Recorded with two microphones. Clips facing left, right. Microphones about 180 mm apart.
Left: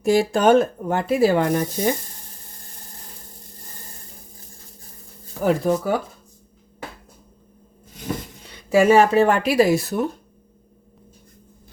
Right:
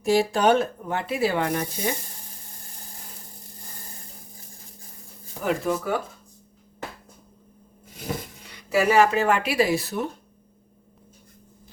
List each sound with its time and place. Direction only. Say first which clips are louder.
0.0 s speech: left 3 dB; 50° left (ahead or behind)
5.4 s speech: left 5 dB; 35° left (ahead or behind)
8.4 s speech: left 6 dB; 25° left (ahead or behind); by 10.1 s 45° left (ahead or behind)